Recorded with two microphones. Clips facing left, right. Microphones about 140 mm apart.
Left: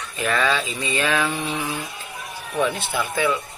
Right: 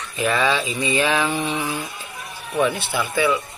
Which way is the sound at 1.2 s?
30° right (ahead or behind).